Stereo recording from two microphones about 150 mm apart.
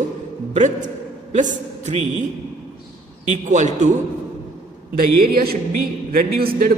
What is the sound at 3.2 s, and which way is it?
Speech, 55° right (ahead or behind).